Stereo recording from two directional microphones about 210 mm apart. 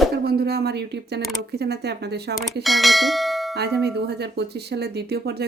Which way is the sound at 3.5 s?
50° right (ahead or behind).